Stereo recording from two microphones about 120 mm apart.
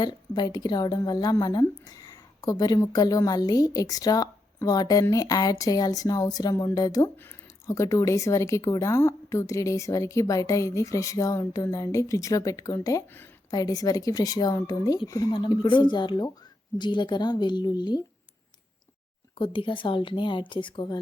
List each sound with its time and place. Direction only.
0.0 s a woman's voice: 35° left (ahead or behind)
19.4 s a woman's voice: 45° left (ahead or behind)